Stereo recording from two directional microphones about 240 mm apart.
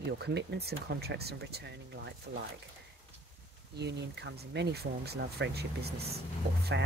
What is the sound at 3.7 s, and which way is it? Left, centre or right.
Speech, right.